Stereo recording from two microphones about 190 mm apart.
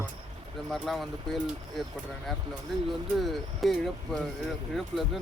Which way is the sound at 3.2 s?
Centre (ahead or behind).